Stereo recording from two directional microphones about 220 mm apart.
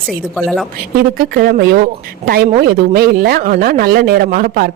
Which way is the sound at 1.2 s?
40° right (ahead or behind).